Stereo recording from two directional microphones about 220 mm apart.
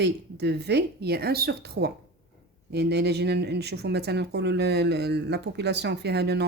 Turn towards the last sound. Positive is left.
turn(degrees=-50)  # may be behind; listen again after turning